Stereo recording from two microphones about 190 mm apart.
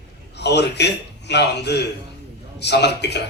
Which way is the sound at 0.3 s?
65° left (ahead or behind).